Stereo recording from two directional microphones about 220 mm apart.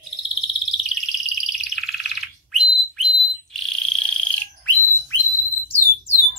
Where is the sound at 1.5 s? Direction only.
Centre (ahead or behind).